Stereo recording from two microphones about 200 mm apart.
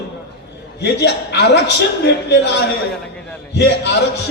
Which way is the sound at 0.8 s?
60° left (ahead or behind).